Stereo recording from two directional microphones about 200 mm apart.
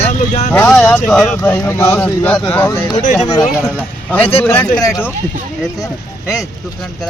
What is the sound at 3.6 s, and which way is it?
Speech, 10° left (ahead or behind).